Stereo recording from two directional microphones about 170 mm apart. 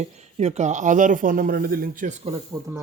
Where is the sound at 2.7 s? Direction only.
20° right (ahead or behind).